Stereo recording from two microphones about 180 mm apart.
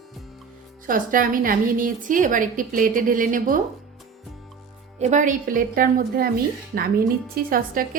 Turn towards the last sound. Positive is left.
turn(degrees=-55)  # may be behind; listen again after turning